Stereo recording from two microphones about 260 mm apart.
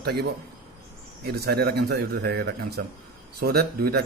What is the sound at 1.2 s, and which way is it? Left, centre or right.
A man's voice, right.